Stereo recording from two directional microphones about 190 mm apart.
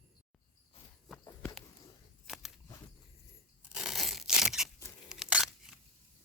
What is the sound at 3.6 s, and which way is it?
Tearing, centre (ahead or behind).